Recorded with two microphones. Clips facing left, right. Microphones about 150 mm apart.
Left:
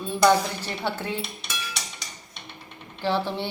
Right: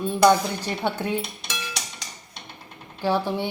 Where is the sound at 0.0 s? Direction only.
15° right (ahead or behind).